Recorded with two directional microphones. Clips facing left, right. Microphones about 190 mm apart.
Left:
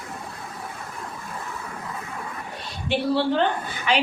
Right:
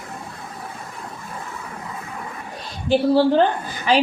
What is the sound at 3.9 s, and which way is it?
Speech, 35° right (ahead or behind).